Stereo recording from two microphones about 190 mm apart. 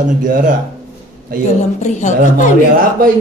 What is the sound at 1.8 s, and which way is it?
Speech, 40° left (ahead or behind).